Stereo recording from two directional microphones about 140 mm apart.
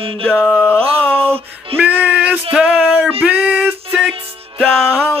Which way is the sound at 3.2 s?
10° right (ahead or behind).